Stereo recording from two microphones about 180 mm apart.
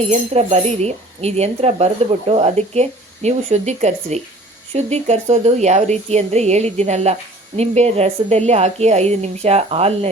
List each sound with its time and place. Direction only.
0.0 s speech: 35° right (ahead or behind)